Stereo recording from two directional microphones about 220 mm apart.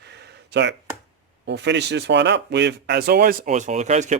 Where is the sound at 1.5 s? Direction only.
50° right (ahead or behind).